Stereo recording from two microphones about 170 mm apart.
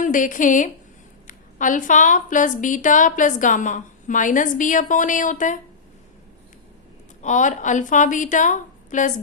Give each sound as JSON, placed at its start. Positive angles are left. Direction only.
{"t": 0.0, "sound": "a woman's voice", "side_deg": 50}
{"t": 7.2, "sound": "a woman's voice", "side_deg": 45}